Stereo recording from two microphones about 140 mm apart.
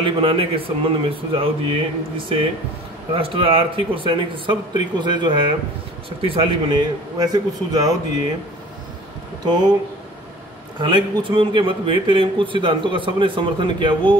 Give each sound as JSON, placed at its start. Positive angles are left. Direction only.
{"t": 0.0, "sound": "speech", "side_deg": -40}
{"t": 9.4, "sound": "speech", "side_deg": -30}
{"t": 10.8, "sound": "speech", "side_deg": -35}